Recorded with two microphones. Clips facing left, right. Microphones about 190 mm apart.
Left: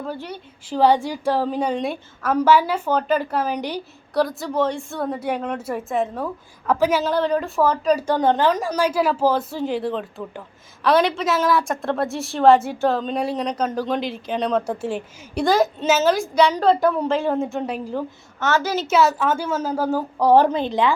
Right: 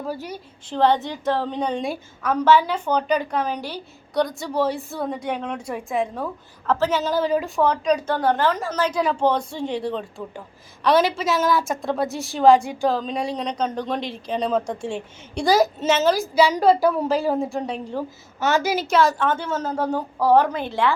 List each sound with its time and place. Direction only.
0.6 s a woman's voice: 10° left (ahead or behind)
7.0 s a woman's voice: centre (ahead or behind)
18.3 s a woman's voice: 15° right (ahead or behind)
18.9 s a woman's voice: 5° left (ahead or behind)
20.3 s a woman's voice: 30° left (ahead or behind)
20.6 s a woman's voice: 20° left (ahead or behind)